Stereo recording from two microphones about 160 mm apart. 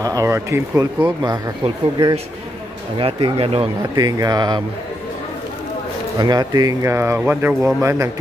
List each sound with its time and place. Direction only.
0.0 s speech: 20° right (ahead or behind)
3.0 s speech: 35° right (ahead or behind)
3.9 s speech: 25° right (ahead or behind)
6.1 s speech: 25° right (ahead or behind)